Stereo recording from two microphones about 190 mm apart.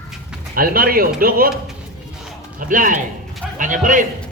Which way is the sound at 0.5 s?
50° right (ahead or behind).